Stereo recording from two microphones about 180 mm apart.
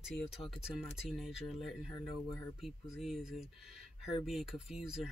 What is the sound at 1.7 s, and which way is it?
Speech, 25° left (ahead or behind).